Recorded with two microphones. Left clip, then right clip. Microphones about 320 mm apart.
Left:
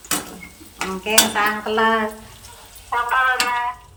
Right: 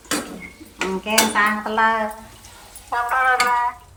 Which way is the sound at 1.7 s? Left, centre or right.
Right.